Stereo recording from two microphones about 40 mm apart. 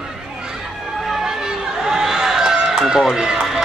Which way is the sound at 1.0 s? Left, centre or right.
Centre.